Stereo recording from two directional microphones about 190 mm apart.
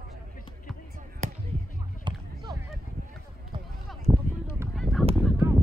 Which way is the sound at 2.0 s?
25° right (ahead or behind).